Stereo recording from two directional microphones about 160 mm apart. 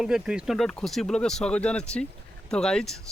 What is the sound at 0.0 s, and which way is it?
Speech, 5° right (ahead or behind).